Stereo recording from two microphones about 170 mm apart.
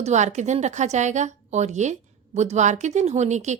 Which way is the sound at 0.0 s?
45° right (ahead or behind).